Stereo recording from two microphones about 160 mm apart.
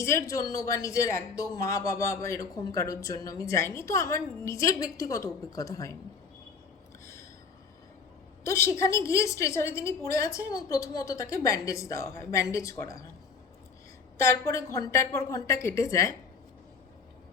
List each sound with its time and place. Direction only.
0.0 s speech: 20° left (ahead or behind)
8.4 s a woman's voice: 15° left (ahead or behind)
14.2 s speech: 15° left (ahead or behind)